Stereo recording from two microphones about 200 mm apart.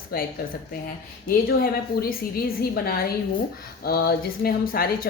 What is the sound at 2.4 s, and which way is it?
Speech, 50° left (ahead or behind).